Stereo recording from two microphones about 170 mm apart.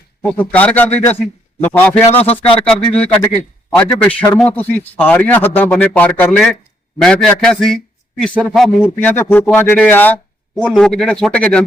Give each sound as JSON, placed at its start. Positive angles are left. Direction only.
{"t": 0.2, "sound": "a man's voice", "side_deg": 10}
{"t": 2.2, "sound": "speech", "side_deg": 35}
{"t": 2.6, "sound": "a man's voice", "side_deg": 5}